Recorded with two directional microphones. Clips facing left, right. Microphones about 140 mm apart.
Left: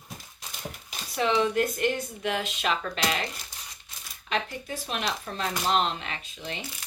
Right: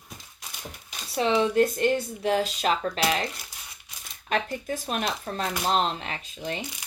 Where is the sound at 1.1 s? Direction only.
30° right (ahead or behind).